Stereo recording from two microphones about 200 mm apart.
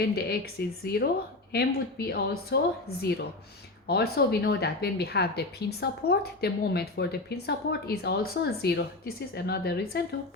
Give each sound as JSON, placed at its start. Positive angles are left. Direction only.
{"t": 0.0, "sound": "a woman's voice", "side_deg": 50}